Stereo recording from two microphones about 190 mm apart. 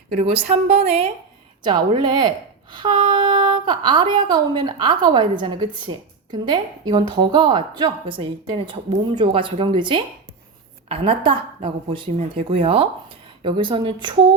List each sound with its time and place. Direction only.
0.1 s a woman's voice: 30° right (ahead or behind)